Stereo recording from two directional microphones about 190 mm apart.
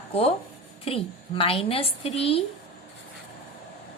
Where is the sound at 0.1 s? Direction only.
30° left (ahead or behind).